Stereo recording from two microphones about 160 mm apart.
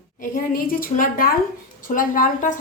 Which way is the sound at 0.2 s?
60° left (ahead or behind).